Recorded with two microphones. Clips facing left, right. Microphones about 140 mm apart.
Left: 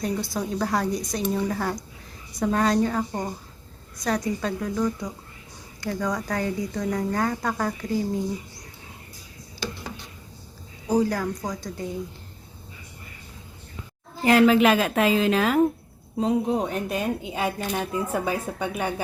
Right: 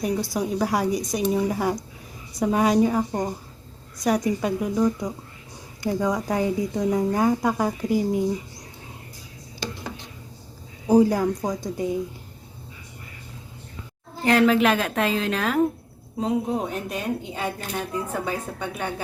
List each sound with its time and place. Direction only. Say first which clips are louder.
0.0 s a woman's voice: right 3 dB; 10° right (ahead or behind)
11.0 s speech: right 5 dB; 20° right (ahead or behind)
14.3 s speech: left 1 dB; 5° left (ahead or behind)